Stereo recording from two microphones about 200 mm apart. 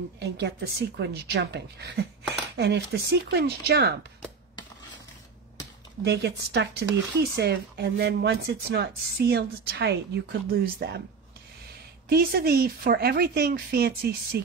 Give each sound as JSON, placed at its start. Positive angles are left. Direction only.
{"t": 0.2, "sound": "speech", "side_deg": -55}
{"t": 6.0, "sound": "speech", "side_deg": -55}
{"t": 12.1, "sound": "speech", "side_deg": -50}